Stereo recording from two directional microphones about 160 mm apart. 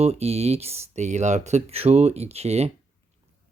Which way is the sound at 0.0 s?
40° right (ahead or behind).